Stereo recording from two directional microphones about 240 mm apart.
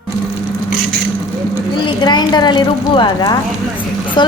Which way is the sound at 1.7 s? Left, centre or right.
Centre.